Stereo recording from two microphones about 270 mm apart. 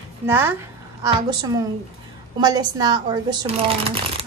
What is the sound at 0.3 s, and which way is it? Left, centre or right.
A woman's voice, centre.